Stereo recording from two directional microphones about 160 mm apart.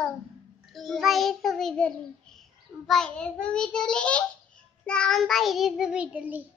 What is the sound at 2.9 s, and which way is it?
A child's voice, 5° left (ahead or behind).